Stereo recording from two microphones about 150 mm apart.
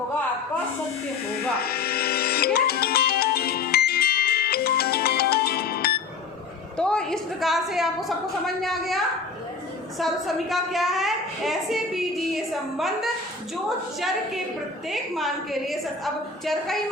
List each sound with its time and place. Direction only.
1.5 s music: 90° left
6.7 s a woman's voice: 5° left (ahead or behind)